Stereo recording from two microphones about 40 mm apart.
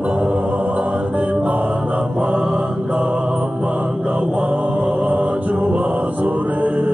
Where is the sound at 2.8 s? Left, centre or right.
Right.